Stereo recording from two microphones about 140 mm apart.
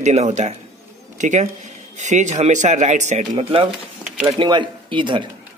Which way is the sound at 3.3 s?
40° right (ahead or behind).